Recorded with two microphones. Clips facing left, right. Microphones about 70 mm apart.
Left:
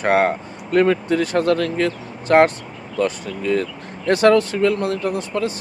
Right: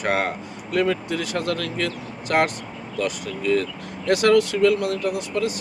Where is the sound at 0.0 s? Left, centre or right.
Left.